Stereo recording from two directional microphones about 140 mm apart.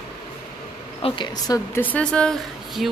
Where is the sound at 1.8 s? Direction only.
10° left (ahead or behind).